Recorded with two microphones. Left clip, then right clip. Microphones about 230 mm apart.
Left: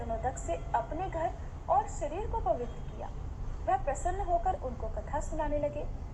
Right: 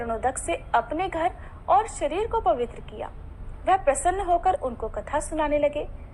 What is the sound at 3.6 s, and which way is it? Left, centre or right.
A woman's voice, right.